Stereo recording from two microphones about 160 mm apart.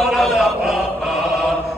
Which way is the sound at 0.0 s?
Centre (ahead or behind).